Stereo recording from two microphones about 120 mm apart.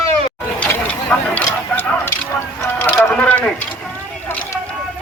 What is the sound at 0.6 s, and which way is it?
Vehicle, 10° left (ahead or behind).